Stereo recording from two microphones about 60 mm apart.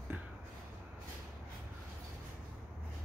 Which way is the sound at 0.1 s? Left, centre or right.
Right.